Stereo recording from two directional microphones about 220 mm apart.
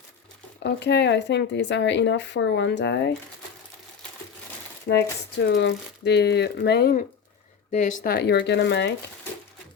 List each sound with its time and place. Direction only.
0.6 s speech: 50° left (ahead or behind)
4.9 s speech: 50° left (ahead or behind)
7.7 s speech: 35° left (ahead or behind); by 8.9 s 50° left (ahead or behind)